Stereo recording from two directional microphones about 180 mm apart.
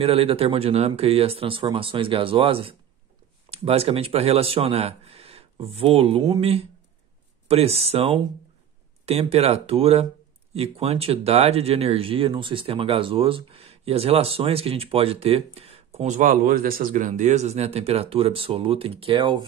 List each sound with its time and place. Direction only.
0.0 s speech: 30° right (ahead or behind)